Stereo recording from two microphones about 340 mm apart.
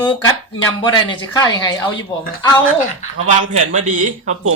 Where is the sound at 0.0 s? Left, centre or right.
Centre.